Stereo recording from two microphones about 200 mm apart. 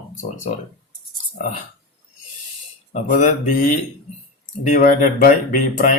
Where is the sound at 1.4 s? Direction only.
40° left (ahead or behind).